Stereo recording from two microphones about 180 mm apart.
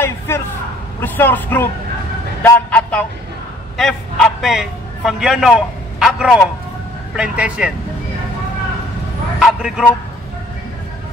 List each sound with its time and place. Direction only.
1.0 s a man's voice: 10° left (ahead or behind); by 7.7 s 5° right (ahead or behind)
9.4 s speech: 5° right (ahead or behind)